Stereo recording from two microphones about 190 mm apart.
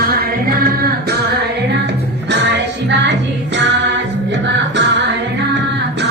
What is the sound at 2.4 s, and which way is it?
Music, 65° right (ahead or behind).